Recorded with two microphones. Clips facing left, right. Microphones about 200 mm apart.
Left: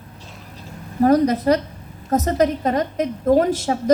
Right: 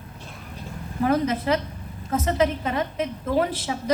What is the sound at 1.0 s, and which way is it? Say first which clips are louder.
A woman's voice: left 7 dB; 40° left (ahead or behind).